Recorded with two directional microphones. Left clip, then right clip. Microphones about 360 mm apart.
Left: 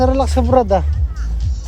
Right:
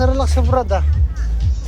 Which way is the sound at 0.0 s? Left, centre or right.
Left.